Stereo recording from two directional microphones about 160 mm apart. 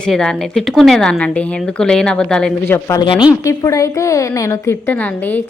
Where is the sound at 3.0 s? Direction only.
30° left (ahead or behind).